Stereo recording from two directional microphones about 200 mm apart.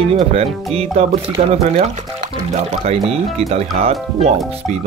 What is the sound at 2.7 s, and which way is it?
Speech, 30° right (ahead or behind).